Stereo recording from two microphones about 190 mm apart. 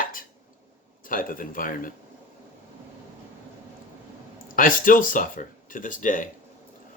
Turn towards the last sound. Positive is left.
turn(degrees=45)  # may be behind; listen again after turning